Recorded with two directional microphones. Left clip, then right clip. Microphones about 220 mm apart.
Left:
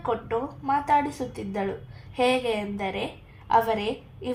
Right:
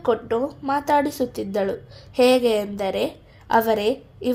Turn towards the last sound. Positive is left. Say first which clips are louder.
# right 7 dB
turn(degrees=-45)  # may be behind; listen again after turning